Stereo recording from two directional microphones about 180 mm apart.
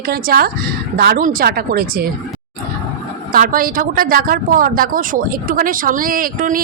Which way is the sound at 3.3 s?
50° right (ahead or behind).